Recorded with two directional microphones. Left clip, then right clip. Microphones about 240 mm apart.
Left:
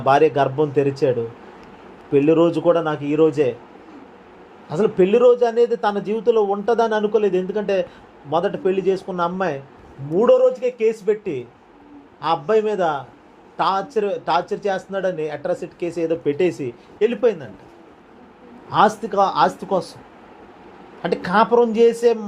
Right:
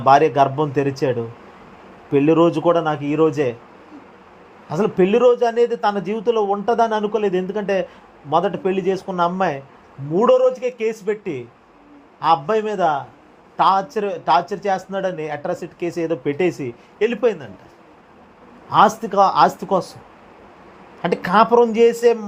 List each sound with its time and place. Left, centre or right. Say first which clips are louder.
0.0 s a man's voice: right 2 dB; right
2.1 s a man's voice: even; right
4.7 s a man's voice: even; right
18.7 s a man's voice: right 2 dB; right
21.0 s a man's voice: right 2 dB; right